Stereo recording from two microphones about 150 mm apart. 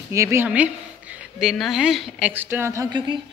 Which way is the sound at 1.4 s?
Centre (ahead or behind).